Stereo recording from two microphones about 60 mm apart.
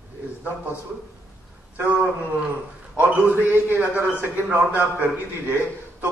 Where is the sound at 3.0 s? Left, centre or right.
Right.